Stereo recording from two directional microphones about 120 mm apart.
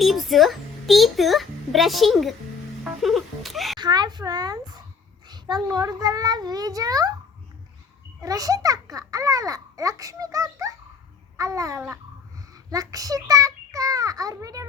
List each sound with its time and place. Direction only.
0.0 s a child's voice: centre (ahead or behind)
3.8 s a child's voice: 35° right (ahead or behind)
5.3 s a sound: 35° right (ahead or behind)
5.6 s a child's voice: 30° right (ahead or behind)
8.2 s a child's voice: 30° right (ahead or behind)